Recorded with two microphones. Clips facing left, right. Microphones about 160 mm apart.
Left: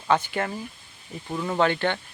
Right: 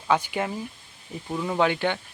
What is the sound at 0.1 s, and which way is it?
Speech, 10° right (ahead or behind).